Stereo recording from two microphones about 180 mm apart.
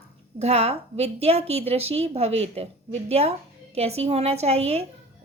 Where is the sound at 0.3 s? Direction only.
35° right (ahead or behind).